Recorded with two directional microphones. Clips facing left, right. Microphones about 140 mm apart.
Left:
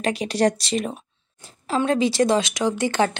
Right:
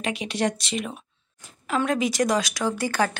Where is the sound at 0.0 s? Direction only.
35° left (ahead or behind).